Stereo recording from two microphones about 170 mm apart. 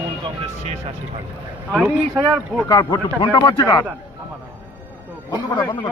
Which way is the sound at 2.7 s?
20° left (ahead or behind).